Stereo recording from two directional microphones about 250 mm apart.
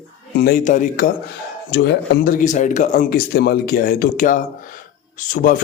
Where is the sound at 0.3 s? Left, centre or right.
Left.